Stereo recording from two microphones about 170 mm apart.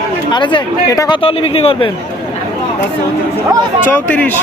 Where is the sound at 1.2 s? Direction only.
35° left (ahead or behind).